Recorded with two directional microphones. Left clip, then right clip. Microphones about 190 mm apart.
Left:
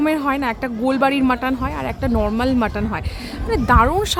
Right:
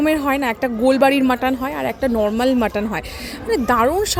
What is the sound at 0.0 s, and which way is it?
Speech, 15° right (ahead or behind).